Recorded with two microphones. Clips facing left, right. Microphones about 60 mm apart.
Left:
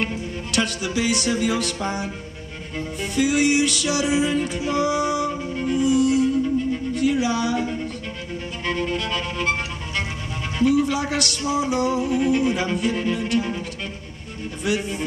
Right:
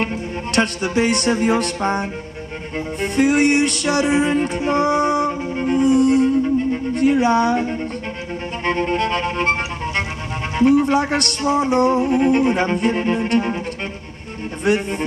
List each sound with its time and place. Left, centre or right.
0.0 s speech: right
3.0 s music: right
6.9 s speech: right
8.6 s music: right
14.6 s music: right